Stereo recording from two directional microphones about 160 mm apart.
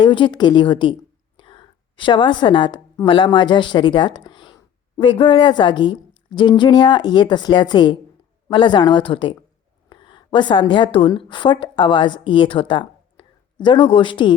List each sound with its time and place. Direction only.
0.0 s a woman's voice: 30° left (ahead or behind)